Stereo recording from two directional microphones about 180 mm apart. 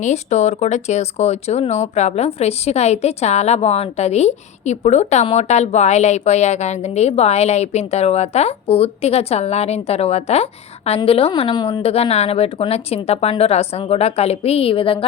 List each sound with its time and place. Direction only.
0.0 s speech: 40° left (ahead or behind)